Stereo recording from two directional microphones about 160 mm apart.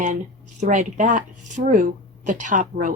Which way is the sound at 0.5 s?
50° right (ahead or behind).